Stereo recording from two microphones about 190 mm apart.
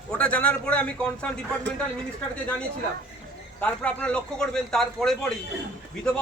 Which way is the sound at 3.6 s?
5° left (ahead or behind).